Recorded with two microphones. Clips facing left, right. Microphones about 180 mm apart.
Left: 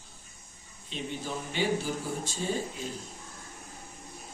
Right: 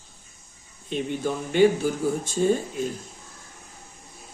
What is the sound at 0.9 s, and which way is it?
Speech, 55° right (ahead or behind).